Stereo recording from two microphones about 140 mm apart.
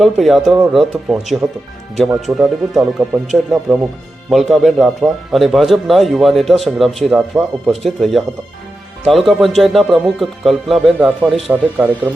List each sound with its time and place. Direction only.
0.0 s speech: centre (ahead or behind)